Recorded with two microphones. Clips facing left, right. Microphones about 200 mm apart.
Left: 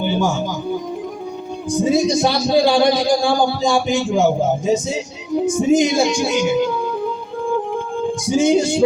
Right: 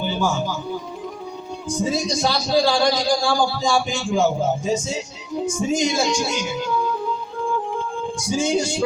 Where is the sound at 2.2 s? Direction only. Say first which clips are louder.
Left 4 dB; 15° left (ahead or behind).